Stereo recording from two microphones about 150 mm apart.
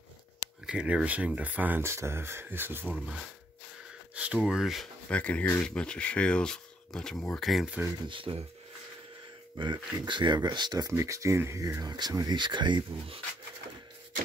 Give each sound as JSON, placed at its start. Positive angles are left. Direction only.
{"t": 0.7, "sound": "speech", "side_deg": -5}
{"t": 8.1, "sound": "speech", "side_deg": -35}
{"t": 9.6, "sound": "speech", "side_deg": -30}